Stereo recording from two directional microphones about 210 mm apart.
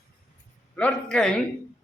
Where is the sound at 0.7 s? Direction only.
5° left (ahead or behind).